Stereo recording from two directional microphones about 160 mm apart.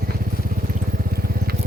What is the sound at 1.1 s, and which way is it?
Vehicle, 70° right (ahead or behind).